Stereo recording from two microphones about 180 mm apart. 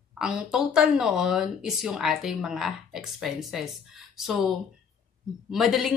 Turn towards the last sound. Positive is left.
turn(degrees=0)  # may be behind; listen again after turning